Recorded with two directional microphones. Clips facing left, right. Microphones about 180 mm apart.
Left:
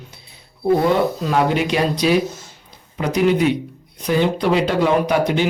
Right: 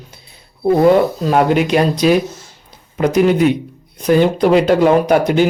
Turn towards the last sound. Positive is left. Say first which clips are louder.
# right 5 dB
turn(degrees=-45)  # may be behind; listen again after turning